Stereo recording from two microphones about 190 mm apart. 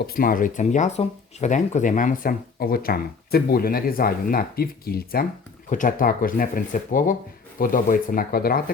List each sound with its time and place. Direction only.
0.0 s speech: 50° left (ahead or behind)